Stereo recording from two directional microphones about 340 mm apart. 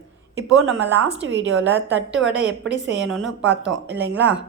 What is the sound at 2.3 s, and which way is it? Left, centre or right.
Speech, centre.